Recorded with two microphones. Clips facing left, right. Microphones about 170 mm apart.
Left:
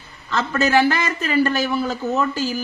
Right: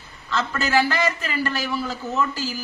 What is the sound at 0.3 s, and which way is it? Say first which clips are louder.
A man's voice: left 4 dB; 50° left (ahead or behind).